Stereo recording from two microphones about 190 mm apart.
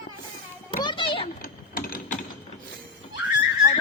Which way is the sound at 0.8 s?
25° left (ahead or behind).